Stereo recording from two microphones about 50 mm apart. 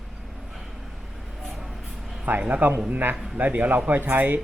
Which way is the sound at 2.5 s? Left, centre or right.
Right.